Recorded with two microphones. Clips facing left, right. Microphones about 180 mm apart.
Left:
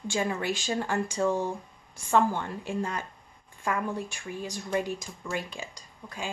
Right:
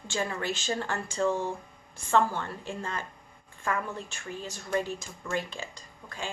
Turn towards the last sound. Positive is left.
turn(degrees=10)  # may be behind; listen again after turning